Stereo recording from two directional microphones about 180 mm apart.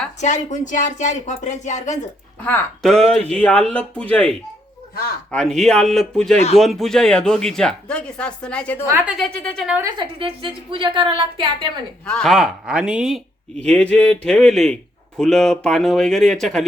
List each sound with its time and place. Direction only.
0.2 s speech: 40° left (ahead or behind)
2.4 s speech: 10° left (ahead or behind)
5.3 s speech: 5° left (ahead or behind)
8.9 s a woman's voice: 15° right (ahead or behind)
9.1 s speech: 5° left (ahead or behind)
9.6 s a woman's voice: 10° right (ahead or behind)
10.0 s a woman's voice: 30° right (ahead or behind)
12.0 s speech: 5° left (ahead or behind)